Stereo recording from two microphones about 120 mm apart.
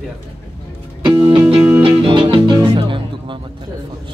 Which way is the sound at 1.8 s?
50° right (ahead or behind).